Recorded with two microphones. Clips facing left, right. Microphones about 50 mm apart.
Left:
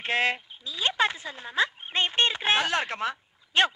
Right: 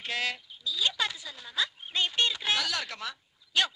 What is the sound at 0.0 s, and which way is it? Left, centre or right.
Speech, left.